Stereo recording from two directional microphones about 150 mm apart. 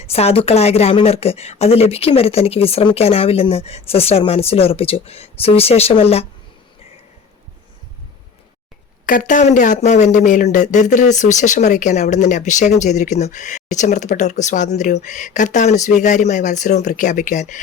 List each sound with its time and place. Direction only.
0.0 s a woman's voice: 45° left (ahead or behind)
9.0 s speech: 60° left (ahead or behind)